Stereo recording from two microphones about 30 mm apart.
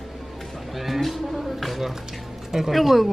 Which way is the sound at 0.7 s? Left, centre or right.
Centre.